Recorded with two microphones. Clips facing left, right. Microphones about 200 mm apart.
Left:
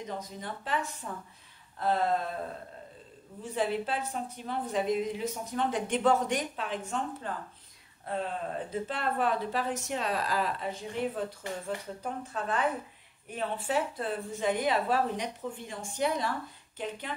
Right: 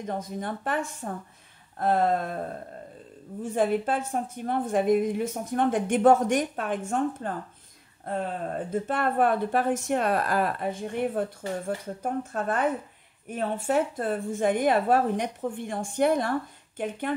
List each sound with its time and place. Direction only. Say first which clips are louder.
0.0 s speech: right 6 dB; 55° right (ahead or behind)
3.5 s speech: right 6 dB; 50° right (ahead or behind)
8.7 s speech: right 7 dB; 50° right (ahead or behind)